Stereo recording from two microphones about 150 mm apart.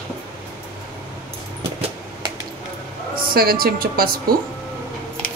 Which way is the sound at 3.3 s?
85° right.